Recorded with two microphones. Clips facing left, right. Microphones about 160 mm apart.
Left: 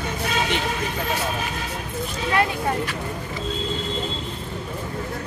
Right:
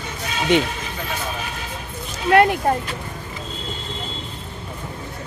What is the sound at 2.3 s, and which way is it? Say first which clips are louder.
Speech: right 8 dB; 65° right (ahead or behind).